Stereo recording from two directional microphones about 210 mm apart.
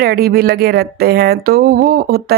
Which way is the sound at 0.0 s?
50° right (ahead or behind).